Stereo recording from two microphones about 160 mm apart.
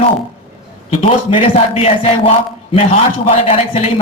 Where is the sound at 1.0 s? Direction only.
35° left (ahead or behind).